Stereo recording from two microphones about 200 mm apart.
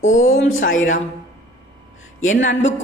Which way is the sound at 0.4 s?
80° left.